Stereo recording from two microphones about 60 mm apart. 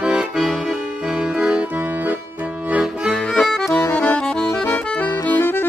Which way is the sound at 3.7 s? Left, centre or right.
Left.